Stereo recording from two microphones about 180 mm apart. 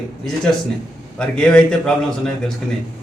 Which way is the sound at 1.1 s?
5° left (ahead or behind).